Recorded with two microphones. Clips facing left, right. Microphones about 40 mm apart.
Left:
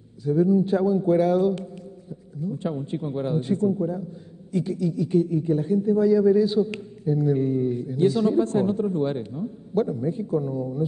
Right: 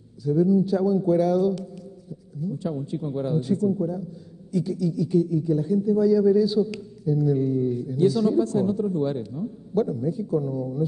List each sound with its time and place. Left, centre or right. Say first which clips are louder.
0.2 s a man's voice: even; left